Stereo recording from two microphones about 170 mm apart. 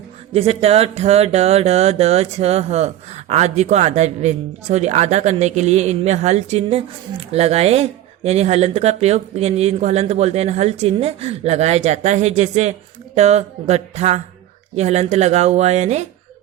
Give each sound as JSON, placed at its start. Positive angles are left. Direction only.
{"t": 0.3, "sound": "speech", "side_deg": -35}